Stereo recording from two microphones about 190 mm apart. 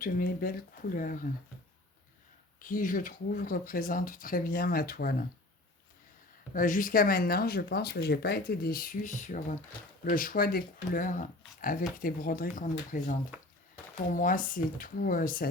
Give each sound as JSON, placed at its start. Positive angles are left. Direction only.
{"t": 0.0, "sound": "speech", "side_deg": 50}
{"t": 2.6, "sound": "speech", "side_deg": 45}
{"t": 6.5, "sound": "speech", "side_deg": 45}